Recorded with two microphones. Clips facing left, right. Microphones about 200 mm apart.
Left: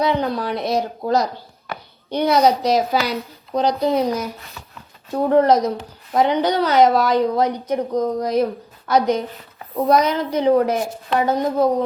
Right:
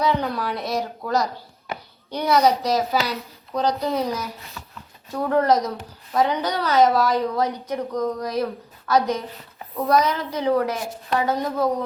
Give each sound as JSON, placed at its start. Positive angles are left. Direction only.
{"t": 0.0, "sound": "a woman's voice", "side_deg": 20}